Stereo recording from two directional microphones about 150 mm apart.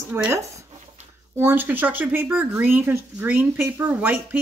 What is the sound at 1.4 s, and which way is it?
Speech, 15° right (ahead or behind).